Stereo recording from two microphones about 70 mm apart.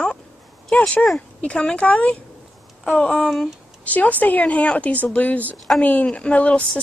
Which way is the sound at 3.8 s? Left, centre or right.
Left.